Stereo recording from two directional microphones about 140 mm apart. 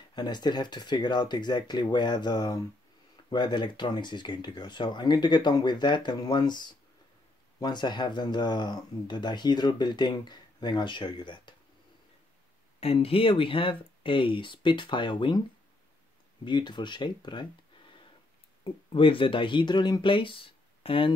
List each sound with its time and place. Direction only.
0.1 s speech: 30° left (ahead or behind)
12.8 s speech: 45° left (ahead or behind)
16.4 s speech: 30° left (ahead or behind)
18.6 s speech: 40° left (ahead or behind)